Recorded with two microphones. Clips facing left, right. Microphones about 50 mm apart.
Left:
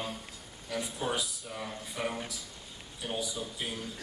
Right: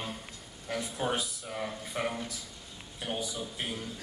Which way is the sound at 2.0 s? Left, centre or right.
Right.